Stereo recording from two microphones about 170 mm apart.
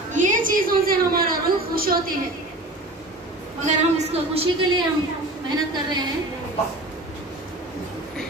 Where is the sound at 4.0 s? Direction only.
35° right (ahead or behind).